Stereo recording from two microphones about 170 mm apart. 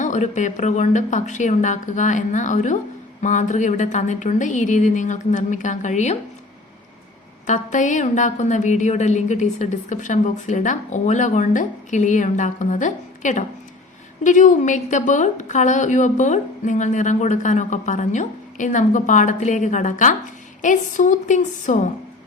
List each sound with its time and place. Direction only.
0.0 s a woman's voice: 45° left (ahead or behind)
7.4 s a woman's voice: 45° left (ahead or behind)